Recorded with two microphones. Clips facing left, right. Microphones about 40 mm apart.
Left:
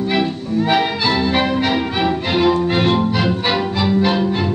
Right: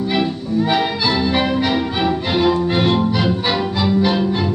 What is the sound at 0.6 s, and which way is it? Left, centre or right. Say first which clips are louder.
Music: left 1 dB; left.